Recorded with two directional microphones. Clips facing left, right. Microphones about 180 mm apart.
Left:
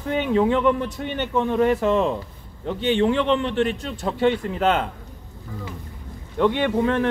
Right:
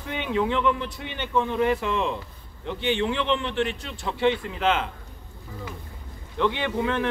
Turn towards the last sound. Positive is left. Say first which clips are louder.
# left 5 dB
turn(degrees=45)  # may be behind; listen again after turning